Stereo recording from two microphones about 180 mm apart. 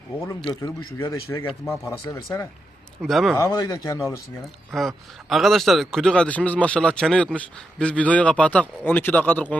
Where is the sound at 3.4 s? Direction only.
20° left (ahead or behind).